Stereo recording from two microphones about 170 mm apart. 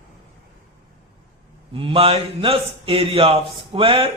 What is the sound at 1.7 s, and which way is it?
A man's voice, 35° right (ahead or behind).